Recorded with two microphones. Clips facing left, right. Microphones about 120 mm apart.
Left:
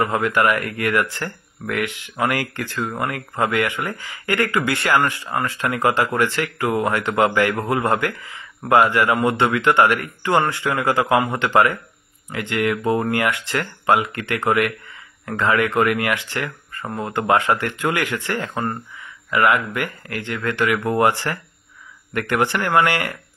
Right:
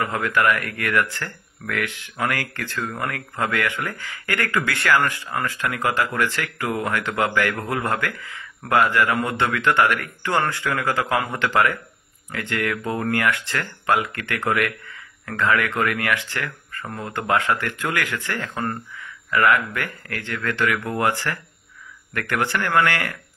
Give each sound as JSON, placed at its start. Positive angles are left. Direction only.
{"t": 0.0, "sound": "speech", "side_deg": 20}